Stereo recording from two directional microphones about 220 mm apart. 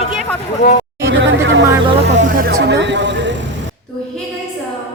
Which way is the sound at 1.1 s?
55° right (ahead or behind).